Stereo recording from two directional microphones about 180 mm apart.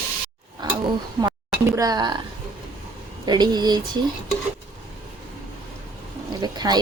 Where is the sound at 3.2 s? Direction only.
20° right (ahead or behind).